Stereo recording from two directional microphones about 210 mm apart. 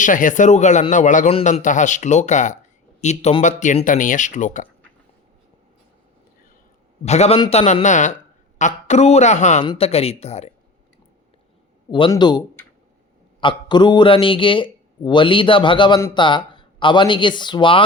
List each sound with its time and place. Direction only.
0.0 s a man's voice: 40° left (ahead or behind)
7.0 s a man's voice: 30° left (ahead or behind)
11.9 s a man's voice: 25° left (ahead or behind)
13.4 s a man's voice: 20° left (ahead or behind)